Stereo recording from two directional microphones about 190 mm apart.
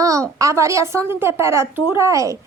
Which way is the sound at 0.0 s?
15° right (ahead or behind).